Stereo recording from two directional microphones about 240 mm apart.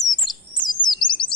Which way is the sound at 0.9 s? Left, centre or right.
Centre.